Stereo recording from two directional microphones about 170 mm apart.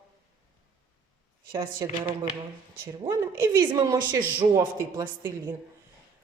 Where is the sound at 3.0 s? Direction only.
15° right (ahead or behind).